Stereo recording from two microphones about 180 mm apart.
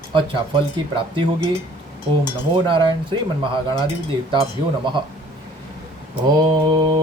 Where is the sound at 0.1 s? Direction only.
30° right (ahead or behind).